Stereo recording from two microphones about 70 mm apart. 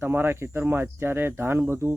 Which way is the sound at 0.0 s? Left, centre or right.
Right.